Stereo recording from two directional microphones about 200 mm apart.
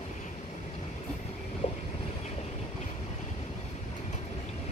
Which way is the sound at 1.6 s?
30° left (ahead or behind).